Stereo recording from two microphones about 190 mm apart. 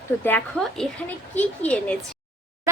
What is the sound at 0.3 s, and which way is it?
A woman's voice, 5° left (ahead or behind).